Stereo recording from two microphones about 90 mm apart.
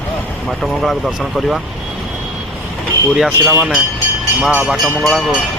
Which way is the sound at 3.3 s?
25° right (ahead or behind).